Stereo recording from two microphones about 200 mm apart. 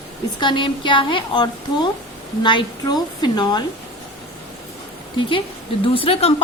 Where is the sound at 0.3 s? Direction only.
25° left (ahead or behind).